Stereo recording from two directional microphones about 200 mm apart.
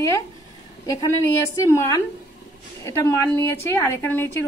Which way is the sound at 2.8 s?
15° left (ahead or behind).